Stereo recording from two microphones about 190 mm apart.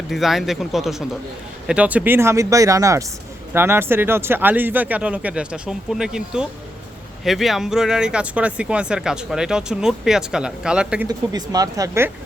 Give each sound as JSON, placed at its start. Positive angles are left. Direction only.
{"t": 0.1, "sound": "speech", "side_deg": 0}
{"t": 11.3, "sound": "speech", "side_deg": -20}